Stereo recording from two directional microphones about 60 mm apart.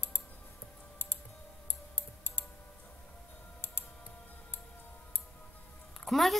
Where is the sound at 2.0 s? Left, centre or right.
Left.